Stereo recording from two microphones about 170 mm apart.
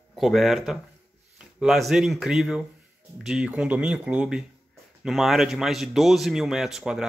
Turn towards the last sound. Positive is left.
turn(degrees=0)  # may be behind; listen again after turning